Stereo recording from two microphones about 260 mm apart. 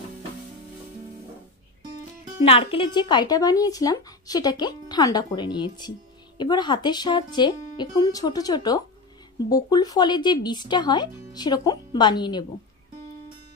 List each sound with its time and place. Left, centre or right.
2.4 s speech: left